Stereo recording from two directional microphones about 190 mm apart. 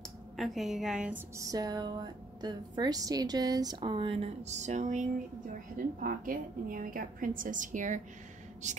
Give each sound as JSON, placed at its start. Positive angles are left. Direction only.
{"t": 0.4, "sound": "a woman's voice", "side_deg": 0}
{"t": 1.3, "sound": "a woman's voice", "side_deg": -15}